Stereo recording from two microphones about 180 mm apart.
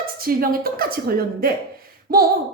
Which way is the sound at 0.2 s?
55° right (ahead or behind).